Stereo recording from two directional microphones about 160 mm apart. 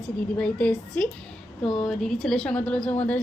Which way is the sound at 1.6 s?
30° left (ahead or behind).